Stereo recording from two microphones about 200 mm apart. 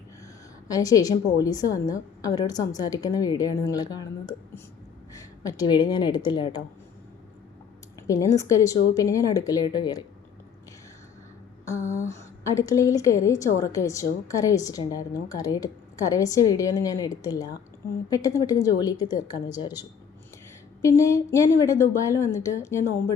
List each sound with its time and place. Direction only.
0.7 s a woman's voice: 20° left (ahead or behind)
8.0 s a woman's voice: 15° left (ahead or behind)
11.9 s a woman's voice: 15° left (ahead or behind)
20.8 s a woman's voice: 15° left (ahead or behind)